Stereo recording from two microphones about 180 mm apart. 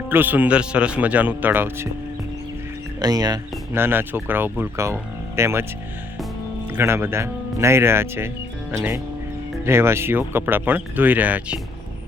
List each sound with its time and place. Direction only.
0.1 s speech: 10° right (ahead or behind)
3.0 s speech: 20° right (ahead or behind)
6.7 s speech: 10° right (ahead or behind)